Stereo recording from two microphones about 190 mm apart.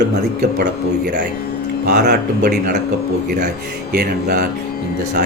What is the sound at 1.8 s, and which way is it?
Speech, 60° right (ahead or behind).